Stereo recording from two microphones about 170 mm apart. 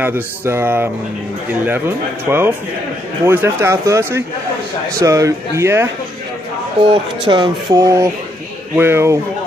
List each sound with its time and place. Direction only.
0.0 s speech: 15° right (ahead or behind)
2.2 s speech: 15° right (ahead or behind)
6.9 s speech: 25° right (ahead or behind)